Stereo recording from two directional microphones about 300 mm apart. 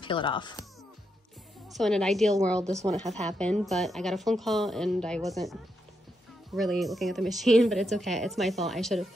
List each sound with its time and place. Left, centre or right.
0.0 s speech: centre
1.7 s a woman's voice: centre